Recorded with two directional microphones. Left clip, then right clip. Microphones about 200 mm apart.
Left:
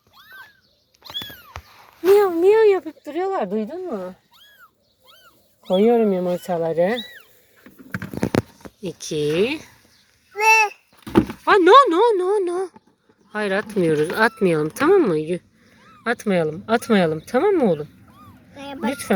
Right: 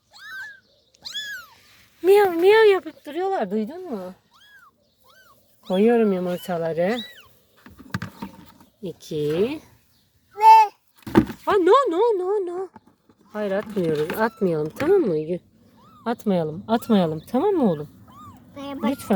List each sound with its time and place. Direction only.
2.1 s speech: 5° left (ahead or behind); by 4.1 s 10° right (ahead or behind)
5.6 s speech: 10° right (ahead or behind)
8.8 s speech: centre (ahead or behind)
10.3 s a sound: 35° left (ahead or behind)
11.1 s speech: 5° right (ahead or behind)
18.5 s dog: 20° left (ahead or behind)
18.8 s speech: 5° right (ahead or behind)